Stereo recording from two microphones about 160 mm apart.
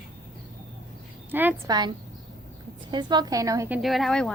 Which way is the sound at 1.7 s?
25° right (ahead or behind).